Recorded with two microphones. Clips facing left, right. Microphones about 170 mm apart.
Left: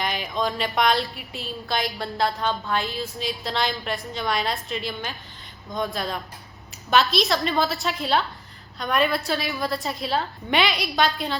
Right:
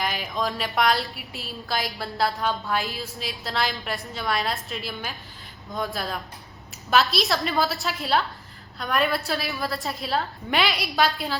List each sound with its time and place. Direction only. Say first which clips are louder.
0.0 s music: left 1 dB; centre (ahead or behind)